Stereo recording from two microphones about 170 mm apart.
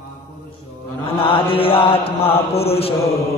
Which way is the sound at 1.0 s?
30° left (ahead or behind).